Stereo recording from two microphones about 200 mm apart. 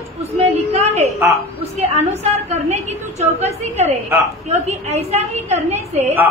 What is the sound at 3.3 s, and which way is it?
A woman's voice, 30° right (ahead or behind).